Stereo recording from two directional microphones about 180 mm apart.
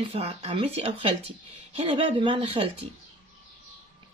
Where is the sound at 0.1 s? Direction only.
35° right (ahead or behind).